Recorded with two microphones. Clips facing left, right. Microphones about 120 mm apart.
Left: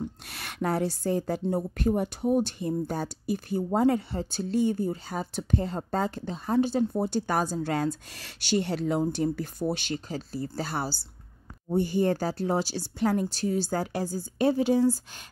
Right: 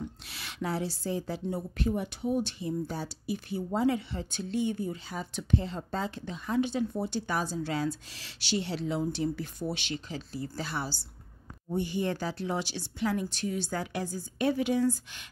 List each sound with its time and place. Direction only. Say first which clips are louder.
0.3 s a woman's voice: left 5 dB; 55° left (ahead or behind); by 15.2 s 35° left (ahead or behind)